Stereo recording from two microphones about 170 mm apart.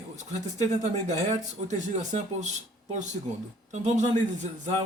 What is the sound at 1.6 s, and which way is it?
Speech, 45° right (ahead or behind).